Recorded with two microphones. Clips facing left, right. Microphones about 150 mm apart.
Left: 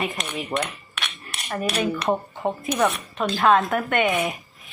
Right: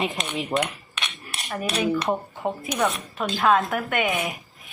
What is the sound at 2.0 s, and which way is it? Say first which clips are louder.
Speech: left 2 dB; 10° left (ahead or behind).